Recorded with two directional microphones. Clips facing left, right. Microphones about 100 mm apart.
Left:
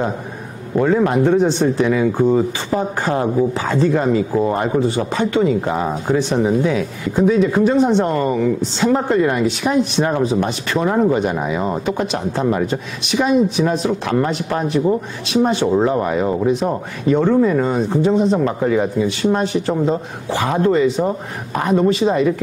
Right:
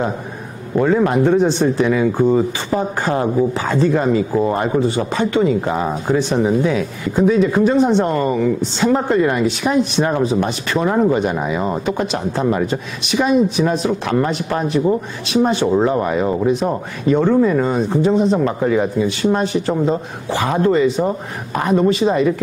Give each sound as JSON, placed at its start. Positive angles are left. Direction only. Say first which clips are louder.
{"t": 0.7, "sound": "speech", "louder": "even", "side_deg": -25}
{"t": 13.7, "sound": "speech", "louder": "even", "side_deg": -20}